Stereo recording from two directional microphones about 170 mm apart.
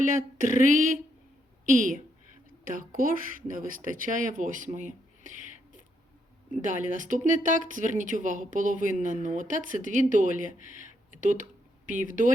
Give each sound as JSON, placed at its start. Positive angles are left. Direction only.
{"t": 0.0, "sound": "speech", "side_deg": -50}
{"t": 6.6, "sound": "speech", "side_deg": -45}